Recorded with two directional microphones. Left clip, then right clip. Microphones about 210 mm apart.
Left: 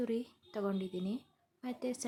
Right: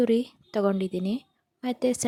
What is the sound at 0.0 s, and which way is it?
A woman's voice, 35° right (ahead or behind).